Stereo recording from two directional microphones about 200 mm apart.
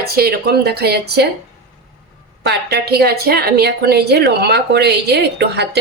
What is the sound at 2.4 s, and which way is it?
Speech, 55° right (ahead or behind).